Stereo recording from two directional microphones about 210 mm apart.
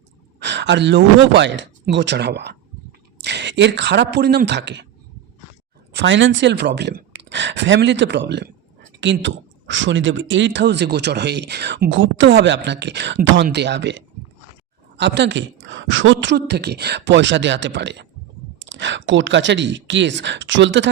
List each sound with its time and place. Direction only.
0.3 s speech: 55° right (ahead or behind)
5.9 s speech: 60° right (ahead or behind)